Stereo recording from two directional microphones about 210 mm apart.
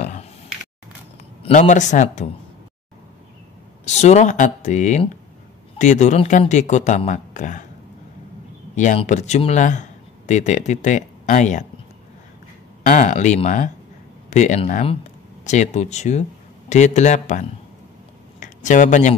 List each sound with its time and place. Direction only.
0.0 s a sound: 35° left (ahead or behind)
1.4 s speech: 35° left (ahead or behind)
3.8 s speech: 35° left (ahead or behind)
8.7 s speech: 35° left (ahead or behind)
12.8 s speech: 35° left (ahead or behind)